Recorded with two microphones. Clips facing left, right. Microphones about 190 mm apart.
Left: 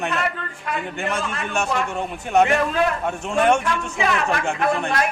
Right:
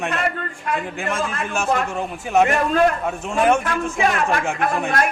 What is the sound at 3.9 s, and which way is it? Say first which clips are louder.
Speech: right 2 dB; 50° right (ahead or behind).